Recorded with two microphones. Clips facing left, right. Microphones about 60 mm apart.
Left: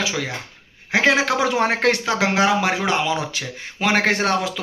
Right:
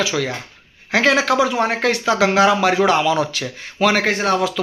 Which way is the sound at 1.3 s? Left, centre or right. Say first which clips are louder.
Right 2 dB; left.